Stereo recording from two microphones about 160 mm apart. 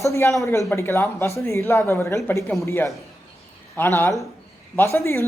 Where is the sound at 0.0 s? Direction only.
20° left (ahead or behind).